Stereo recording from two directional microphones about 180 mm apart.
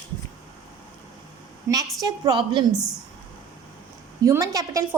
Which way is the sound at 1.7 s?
20° right (ahead or behind).